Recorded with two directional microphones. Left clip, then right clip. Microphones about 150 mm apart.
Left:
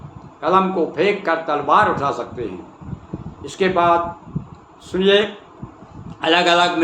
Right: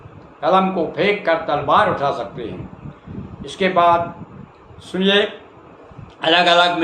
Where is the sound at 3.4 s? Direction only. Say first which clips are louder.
Right 1 dB; 25° left (ahead or behind).